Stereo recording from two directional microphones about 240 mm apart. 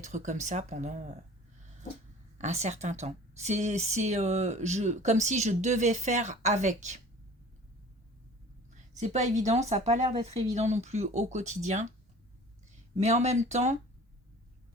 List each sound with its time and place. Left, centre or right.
0.0 s speech: right
2.4 s speech: right
8.7 s speech: right
13.0 s speech: right